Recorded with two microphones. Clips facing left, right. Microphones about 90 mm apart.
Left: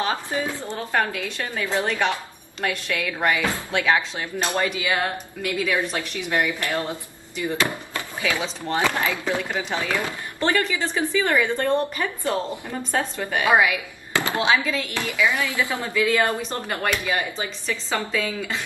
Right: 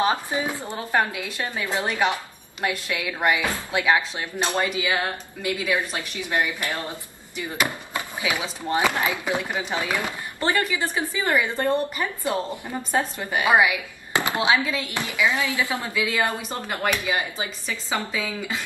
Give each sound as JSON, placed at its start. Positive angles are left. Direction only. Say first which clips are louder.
{"t": 0.0, "sound": "a woman's voice", "louder": "right 2 dB", "side_deg": -20}
{"t": 14.4, "sound": "speech", "louder": "left 1 dB", "side_deg": -5}